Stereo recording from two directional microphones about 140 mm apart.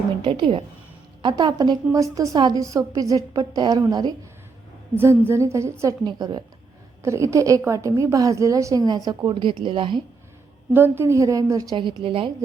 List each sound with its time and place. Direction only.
0.3 s a woman's voice: 40° right (ahead or behind)
4.9 s a woman's voice: 15° right (ahead or behind); by 10.0 s 35° right (ahead or behind)
10.8 s a woman's voice: 15° right (ahead or behind); by 12.3 s 40° right (ahead or behind)